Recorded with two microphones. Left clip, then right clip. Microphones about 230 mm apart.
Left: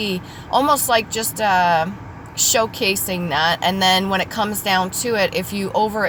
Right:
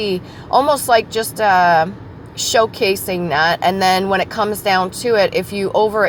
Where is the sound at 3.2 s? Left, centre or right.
Right.